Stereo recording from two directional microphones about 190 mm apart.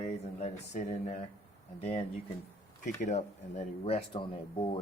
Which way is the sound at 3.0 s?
40° left (ahead or behind).